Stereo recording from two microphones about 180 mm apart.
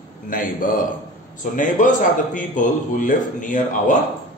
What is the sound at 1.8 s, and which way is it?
Speech, 45° left (ahead or behind).